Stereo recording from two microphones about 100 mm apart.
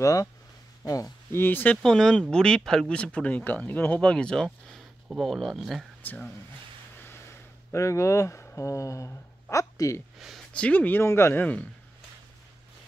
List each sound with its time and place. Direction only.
0.0 s speech: 35° left (ahead or behind)
1.3 s speech: 20° left (ahead or behind)
1.8 s speech: 5° left (ahead or behind)
7.7 s speech: 30° left (ahead or behind)
10.5 s speech: 15° left (ahead or behind)